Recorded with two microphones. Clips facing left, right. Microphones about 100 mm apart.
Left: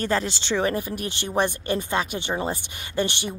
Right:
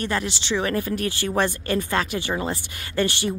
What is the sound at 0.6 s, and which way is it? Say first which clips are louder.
A woman's voice: right 1 dB; 20° left (ahead or behind).